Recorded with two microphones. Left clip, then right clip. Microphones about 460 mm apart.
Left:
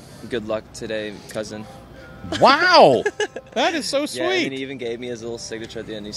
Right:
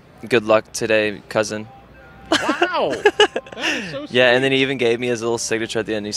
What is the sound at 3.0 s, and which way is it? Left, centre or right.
Speech, right.